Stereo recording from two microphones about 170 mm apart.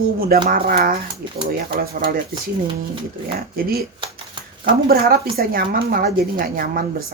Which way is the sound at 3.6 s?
60° right (ahead or behind).